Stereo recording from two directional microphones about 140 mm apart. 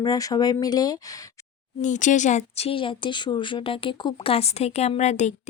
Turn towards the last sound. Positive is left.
turn(degrees=55)  # may be behind; listen again after turning